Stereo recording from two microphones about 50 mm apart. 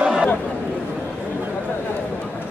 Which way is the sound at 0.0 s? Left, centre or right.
Centre.